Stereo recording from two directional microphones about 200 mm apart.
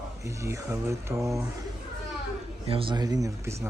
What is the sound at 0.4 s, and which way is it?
Speech, 15° right (ahead or behind).